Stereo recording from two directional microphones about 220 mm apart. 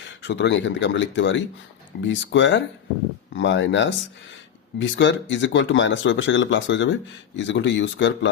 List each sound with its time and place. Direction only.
0.2 s speech: 55° left (ahead or behind)